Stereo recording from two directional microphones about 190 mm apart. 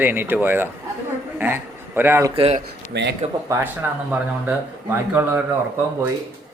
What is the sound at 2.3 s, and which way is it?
Speech, 30° right (ahead or behind).